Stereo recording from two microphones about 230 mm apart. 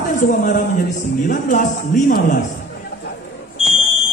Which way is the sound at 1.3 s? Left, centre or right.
Left.